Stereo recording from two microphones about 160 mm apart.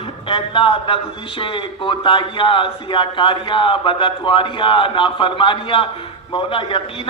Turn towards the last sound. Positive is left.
turn(degrees=35)  # may be behind; listen again after turning